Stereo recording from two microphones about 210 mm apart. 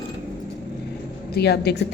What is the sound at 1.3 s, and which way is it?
Speech, 50° left (ahead or behind).